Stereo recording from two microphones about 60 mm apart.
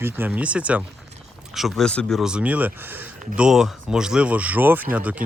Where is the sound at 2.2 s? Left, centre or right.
Centre.